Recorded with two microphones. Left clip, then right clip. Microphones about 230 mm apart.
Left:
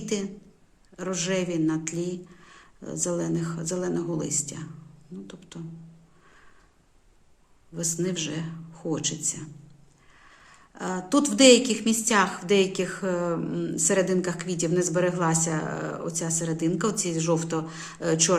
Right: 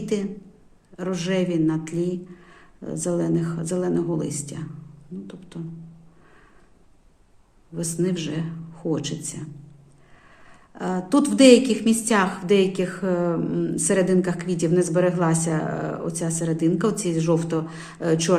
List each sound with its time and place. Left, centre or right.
0.0 s a woman's voice: centre
7.8 s a woman's voice: centre